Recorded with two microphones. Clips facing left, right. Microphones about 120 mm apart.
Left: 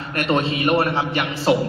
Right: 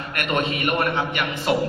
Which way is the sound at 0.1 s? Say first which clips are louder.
Left 4 dB; 30° left (ahead or behind).